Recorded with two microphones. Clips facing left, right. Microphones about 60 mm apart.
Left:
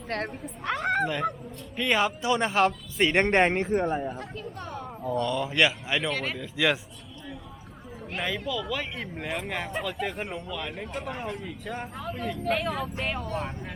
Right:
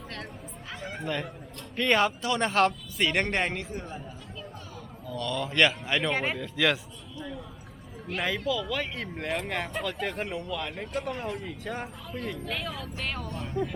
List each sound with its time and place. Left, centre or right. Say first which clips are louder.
0.1 s speech: left 12 dB; left
0.6 s speech: left 13 dB; left
1.7 s speech: right 1 dB; centre
2.2 s speech: left 1 dB; centre
3.0 s speech: left 5 dB; left
5.3 s speech: right 2 dB; centre
8.2 s speech: right 1 dB; centre
12.5 s speech: left 7 dB; left
12.8 s speech: left 4 dB; left
13.2 s speech: left 4 dB; left